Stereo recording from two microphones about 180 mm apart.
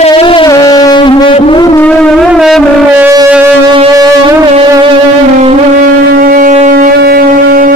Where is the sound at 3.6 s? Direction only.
25° right (ahead or behind).